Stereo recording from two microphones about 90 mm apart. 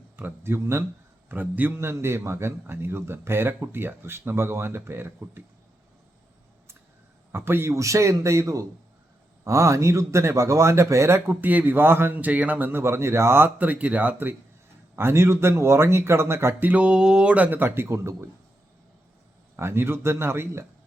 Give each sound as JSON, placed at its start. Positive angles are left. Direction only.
{"t": 0.2, "sound": "a man's voice", "side_deg": -25}
{"t": 7.3, "sound": "speech", "side_deg": -25}
{"t": 11.3, "sound": "a man's voice", "side_deg": -20}
{"t": 19.5, "sound": "a man's voice", "side_deg": -30}